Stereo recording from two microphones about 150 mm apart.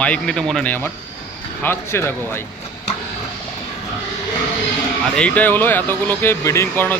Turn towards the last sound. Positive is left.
turn(degrees=15)  # may be behind; listen again after turning